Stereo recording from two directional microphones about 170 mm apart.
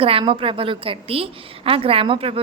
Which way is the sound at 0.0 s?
30° right (ahead or behind).